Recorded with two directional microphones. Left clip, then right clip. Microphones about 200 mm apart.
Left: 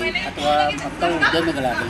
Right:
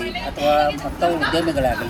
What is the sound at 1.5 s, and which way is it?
Speech, centre (ahead or behind).